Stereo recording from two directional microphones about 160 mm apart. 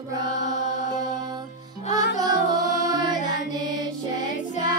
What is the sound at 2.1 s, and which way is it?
Music, 25° right (ahead or behind).